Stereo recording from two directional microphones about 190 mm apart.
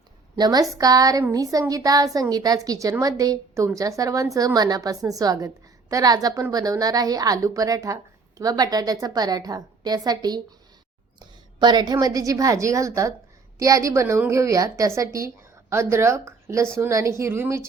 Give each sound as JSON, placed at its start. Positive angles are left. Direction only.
{"t": 0.3, "sound": "a woman's voice", "side_deg": -20}